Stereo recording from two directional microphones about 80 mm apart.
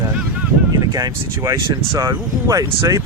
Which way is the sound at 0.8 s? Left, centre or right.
Right.